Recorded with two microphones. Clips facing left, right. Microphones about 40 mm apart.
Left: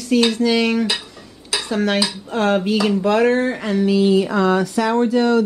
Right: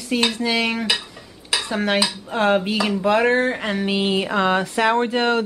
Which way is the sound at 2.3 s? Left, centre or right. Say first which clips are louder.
Left 1 dB; centre.